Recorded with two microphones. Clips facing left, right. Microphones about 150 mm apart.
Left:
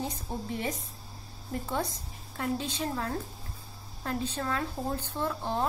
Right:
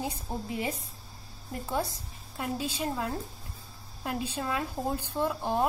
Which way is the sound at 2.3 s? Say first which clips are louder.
Left 1 dB; 10° right (ahead or behind).